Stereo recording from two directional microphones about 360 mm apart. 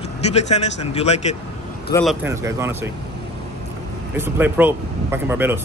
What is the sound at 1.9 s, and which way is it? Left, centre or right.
Speech, centre.